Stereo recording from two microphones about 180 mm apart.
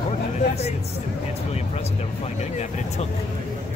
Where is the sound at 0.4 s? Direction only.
35° left (ahead or behind).